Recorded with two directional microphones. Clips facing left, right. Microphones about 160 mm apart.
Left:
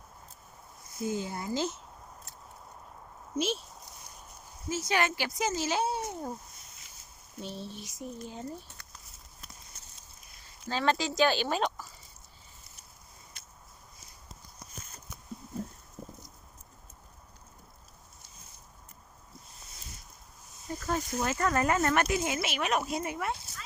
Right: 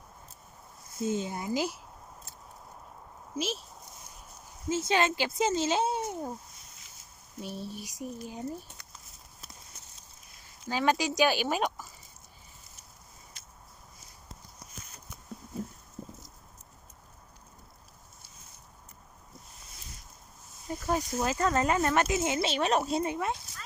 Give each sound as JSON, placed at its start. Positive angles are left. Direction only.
{"t": 1.0, "sound": "speech", "side_deg": -20}
{"t": 3.3, "sound": "speech", "side_deg": 0}
{"t": 4.7, "sound": "speech", "side_deg": -25}
{"t": 7.4, "sound": "speech", "side_deg": -10}
{"t": 10.7, "sound": "speech", "side_deg": -15}
{"t": 13.4, "sound": "a sound", "side_deg": 60}
{"t": 20.7, "sound": "speech", "side_deg": -15}